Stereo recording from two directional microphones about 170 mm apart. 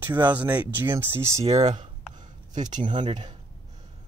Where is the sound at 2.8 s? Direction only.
25° right (ahead or behind).